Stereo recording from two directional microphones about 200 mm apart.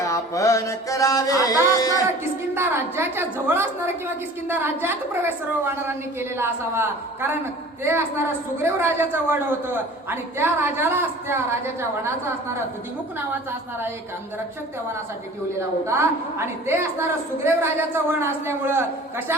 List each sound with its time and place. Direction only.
0.0 s music: 15° left (ahead or behind)
2.6 s a man's voice: 10° right (ahead or behind)
16.6 s a man's voice: 10° right (ahead or behind)